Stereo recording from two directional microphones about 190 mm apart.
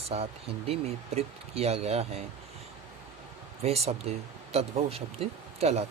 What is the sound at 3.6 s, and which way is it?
Speech, 35° right (ahead or behind).